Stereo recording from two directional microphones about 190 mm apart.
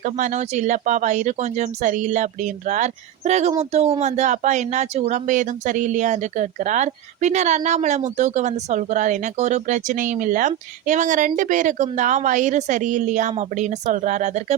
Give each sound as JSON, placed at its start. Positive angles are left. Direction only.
{"t": 0.0, "sound": "speech", "side_deg": -40}